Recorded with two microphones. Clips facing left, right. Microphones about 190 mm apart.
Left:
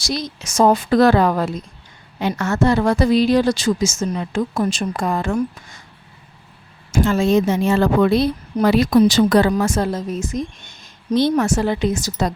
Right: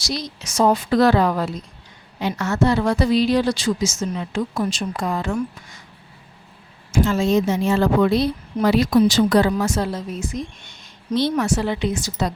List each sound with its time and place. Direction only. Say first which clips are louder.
0.0 s a woman's voice: left 3 dB; 50° left (ahead or behind)
6.9 s a woman's voice: left 2 dB; 55° left (ahead or behind)